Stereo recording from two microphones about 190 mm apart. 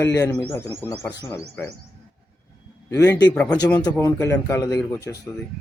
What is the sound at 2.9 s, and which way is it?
Speech, 15° left (ahead or behind).